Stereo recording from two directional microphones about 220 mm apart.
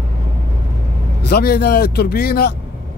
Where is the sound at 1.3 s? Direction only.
45° left (ahead or behind).